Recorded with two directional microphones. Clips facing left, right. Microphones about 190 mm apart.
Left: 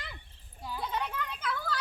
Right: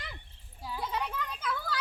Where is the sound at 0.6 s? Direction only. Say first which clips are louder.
Even; 5° right (ahead or behind).